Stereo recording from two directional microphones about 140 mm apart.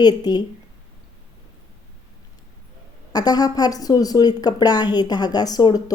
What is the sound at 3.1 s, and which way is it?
A woman's voice, 30° left (ahead or behind).